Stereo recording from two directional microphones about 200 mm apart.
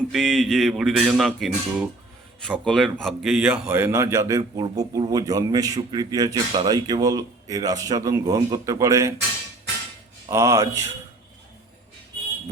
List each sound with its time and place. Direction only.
0.1 s music: centre (ahead or behind)
2.6 s a man's voice: centre (ahead or behind); by 9.1 s 15° right (ahead or behind)
10.2 s a man's voice: 15° right (ahead or behind)